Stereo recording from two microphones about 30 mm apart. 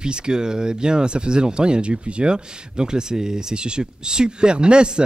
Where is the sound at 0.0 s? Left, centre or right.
Right.